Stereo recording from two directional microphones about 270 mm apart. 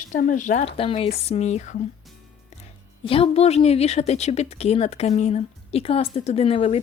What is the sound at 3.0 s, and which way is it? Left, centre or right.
A woman's voice, left.